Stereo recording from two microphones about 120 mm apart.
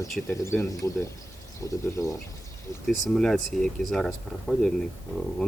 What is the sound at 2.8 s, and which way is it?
Speech, 5° left (ahead or behind).